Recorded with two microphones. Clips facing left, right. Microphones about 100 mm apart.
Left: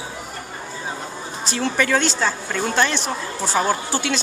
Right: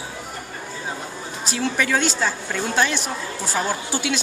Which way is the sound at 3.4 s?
20° left (ahead or behind).